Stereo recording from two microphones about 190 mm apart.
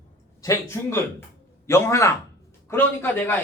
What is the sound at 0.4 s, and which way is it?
A man's voice, 15° left (ahead or behind).